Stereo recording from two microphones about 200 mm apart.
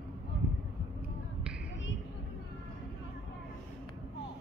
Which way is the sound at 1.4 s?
5° right (ahead or behind).